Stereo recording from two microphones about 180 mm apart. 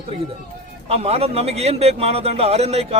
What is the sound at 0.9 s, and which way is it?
A man's voice, 35° right (ahead or behind).